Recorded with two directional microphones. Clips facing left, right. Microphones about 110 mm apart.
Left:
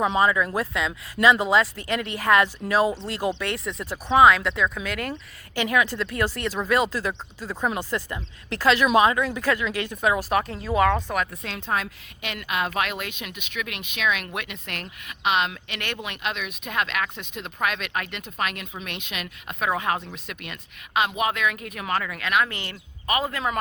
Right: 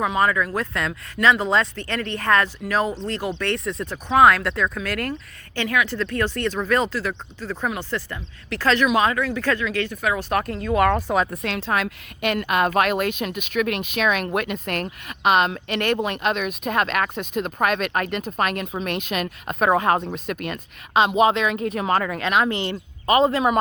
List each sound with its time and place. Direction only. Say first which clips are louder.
0.0 s speech: even; 20° left (ahead or behind)
3.4 s speech: right 4 dB; 5° left (ahead or behind); by 10.2 s 20° left (ahead or behind)
10.2 s speech: right 1 dB; 5° left (ahead or behind)
11.3 s a woman's voice: right 4 dB; 75° right (ahead or behind)
12.3 s speech: right 7 dB; 50° right (ahead or behind)
20.9 s speech: right 7 dB; 25° right (ahead or behind)